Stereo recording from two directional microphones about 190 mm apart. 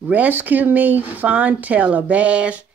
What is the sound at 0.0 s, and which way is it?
Speech, 10° right (ahead or behind).